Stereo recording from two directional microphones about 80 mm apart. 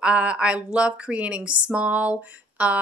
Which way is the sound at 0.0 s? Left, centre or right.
Centre.